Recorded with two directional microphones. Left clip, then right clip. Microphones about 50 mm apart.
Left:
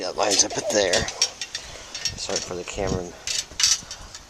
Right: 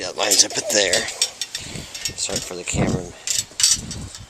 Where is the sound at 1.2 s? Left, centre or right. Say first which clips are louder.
Right 1 dB; centre.